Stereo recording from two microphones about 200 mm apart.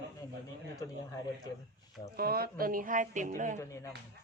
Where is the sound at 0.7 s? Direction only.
15° left (ahead or behind).